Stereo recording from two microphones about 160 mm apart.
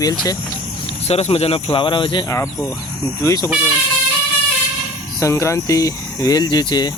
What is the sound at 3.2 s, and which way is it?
Speech, 25° left (ahead or behind).